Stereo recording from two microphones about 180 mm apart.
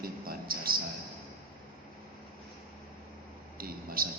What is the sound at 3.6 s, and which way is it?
Speech, 55° right (ahead or behind).